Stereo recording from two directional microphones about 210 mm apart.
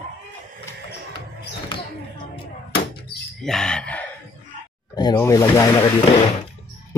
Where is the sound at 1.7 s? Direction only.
25° left (ahead or behind).